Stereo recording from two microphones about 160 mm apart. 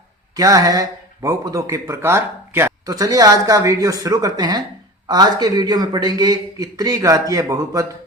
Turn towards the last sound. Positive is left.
turn(degrees=-20)  # may be behind; listen again after turning